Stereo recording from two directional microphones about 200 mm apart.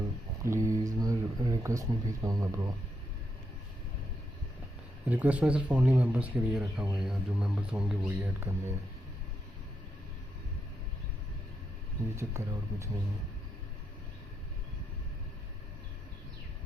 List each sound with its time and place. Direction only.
0.4 s speech: 15° right (ahead or behind)
5.0 s speech: 10° right (ahead or behind)
12.1 s speech: 15° right (ahead or behind)